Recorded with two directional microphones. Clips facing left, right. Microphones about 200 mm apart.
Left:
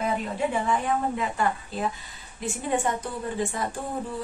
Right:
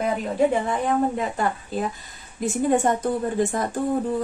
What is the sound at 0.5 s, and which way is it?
A woman's voice, 45° right (ahead or behind).